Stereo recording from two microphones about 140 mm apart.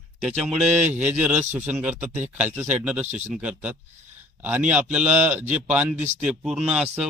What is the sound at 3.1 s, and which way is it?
Speech, 55° right (ahead or behind).